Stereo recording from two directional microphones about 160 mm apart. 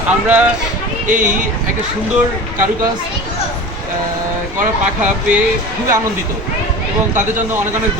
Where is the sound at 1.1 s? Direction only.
55° right (ahead or behind).